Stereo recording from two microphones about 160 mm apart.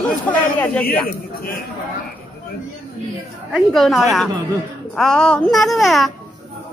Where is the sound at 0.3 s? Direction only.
10° left (ahead or behind).